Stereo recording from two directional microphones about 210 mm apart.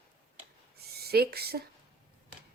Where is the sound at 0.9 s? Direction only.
50° right (ahead or behind).